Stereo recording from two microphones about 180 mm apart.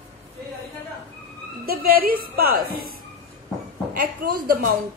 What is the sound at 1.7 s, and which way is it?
A woman's voice, 55° right (ahead or behind).